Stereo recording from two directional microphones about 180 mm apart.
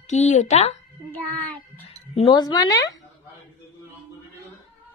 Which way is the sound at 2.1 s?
25° left (ahead or behind).